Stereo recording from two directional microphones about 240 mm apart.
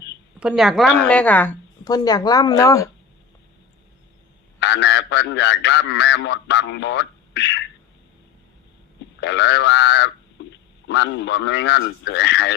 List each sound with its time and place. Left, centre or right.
0.3 s a woman's voice: centre
4.6 s a man's voice: left
9.2 s a man's voice: left